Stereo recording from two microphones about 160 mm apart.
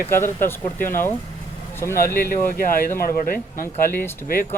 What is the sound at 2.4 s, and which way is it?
Speech, 65° left (ahead or behind).